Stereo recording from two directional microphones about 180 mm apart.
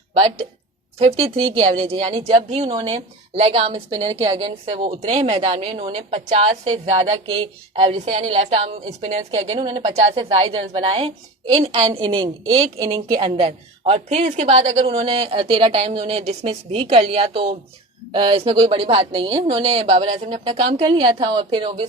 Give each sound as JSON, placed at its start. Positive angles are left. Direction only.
{"t": 0.9, "sound": "a woman's voice", "side_deg": -35}
{"t": 3.8, "sound": "a woman's voice", "side_deg": -20}